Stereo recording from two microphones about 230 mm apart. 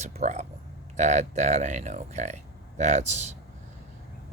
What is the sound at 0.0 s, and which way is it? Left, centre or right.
Speech, right.